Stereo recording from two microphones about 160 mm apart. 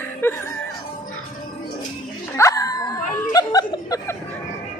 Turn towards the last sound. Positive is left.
turn(degrees=25)  # may be behind; listen again after turning